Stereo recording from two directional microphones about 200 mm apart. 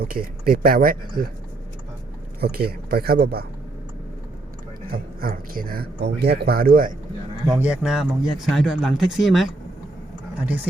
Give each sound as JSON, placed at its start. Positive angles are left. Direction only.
{"t": 0.0, "sound": "speech", "side_deg": -45}
{"t": 2.4, "sound": "speech", "side_deg": -50}
{"t": 4.9, "sound": "speech", "side_deg": -45}
{"t": 7.5, "sound": "a man's voice", "side_deg": -5}